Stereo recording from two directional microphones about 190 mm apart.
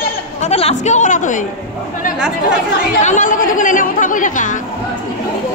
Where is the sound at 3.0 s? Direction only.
45° left (ahead or behind).